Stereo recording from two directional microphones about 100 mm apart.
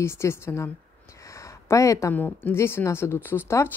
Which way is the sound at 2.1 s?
20° left (ahead or behind).